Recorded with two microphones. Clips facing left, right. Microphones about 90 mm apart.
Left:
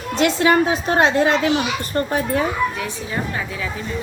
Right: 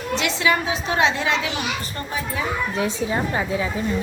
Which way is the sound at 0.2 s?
45° left (ahead or behind).